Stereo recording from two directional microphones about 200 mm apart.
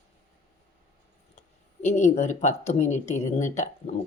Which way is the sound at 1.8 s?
35° left (ahead or behind).